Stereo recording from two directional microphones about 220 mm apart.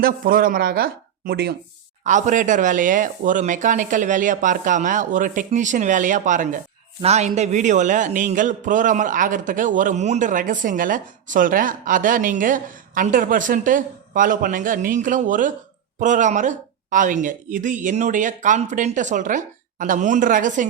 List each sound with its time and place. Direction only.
0.0 s speech: 40° right (ahead or behind)
2.0 s a man's voice: 35° right (ahead or behind)